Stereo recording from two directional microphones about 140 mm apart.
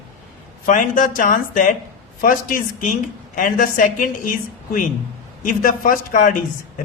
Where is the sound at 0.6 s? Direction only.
65° left (ahead or behind).